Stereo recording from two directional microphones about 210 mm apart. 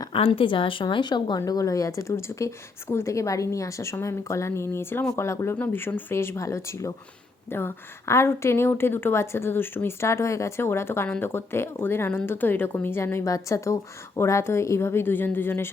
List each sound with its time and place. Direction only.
0.0 s a woman's voice: 25° left (ahead or behind)